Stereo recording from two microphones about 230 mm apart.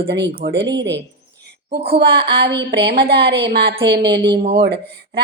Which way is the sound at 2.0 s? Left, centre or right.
Right.